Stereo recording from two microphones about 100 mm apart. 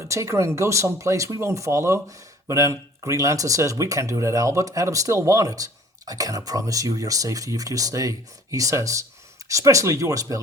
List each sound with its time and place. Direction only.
0.0 s speech: 30° right (ahead or behind)